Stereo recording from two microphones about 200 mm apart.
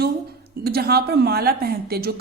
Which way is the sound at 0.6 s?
50° right (ahead or behind).